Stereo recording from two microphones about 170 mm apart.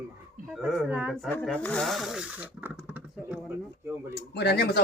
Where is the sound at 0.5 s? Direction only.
Centre (ahead or behind).